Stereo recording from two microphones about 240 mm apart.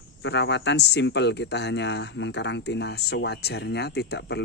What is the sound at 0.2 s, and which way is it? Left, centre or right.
Speech, left.